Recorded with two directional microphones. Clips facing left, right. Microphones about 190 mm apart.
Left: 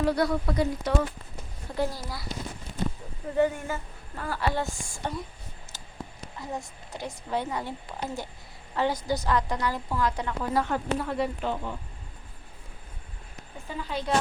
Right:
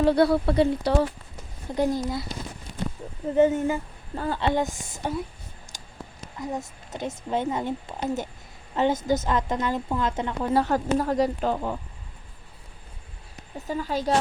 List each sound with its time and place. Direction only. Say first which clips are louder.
0.0 s a woman's voice: right 6 dB; 30° right (ahead or behind)
1.7 s a woman's voice: right 5 dB; 20° right (ahead or behind)
3.3 s a woman's voice: right 5 dB; 20° right (ahead or behind)
5.7 s a sound: right 1 dB; 15° right (ahead or behind)
6.4 s a woman's voice: right 5 dB; 20° right (ahead or behind); by 11.7 s 40° right (ahead or behind)
13.7 s a woman's voice: right 6 dB; 40° right (ahead or behind)